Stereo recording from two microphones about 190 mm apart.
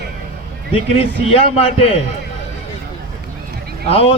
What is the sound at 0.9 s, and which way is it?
Speech, 30° left (ahead or behind).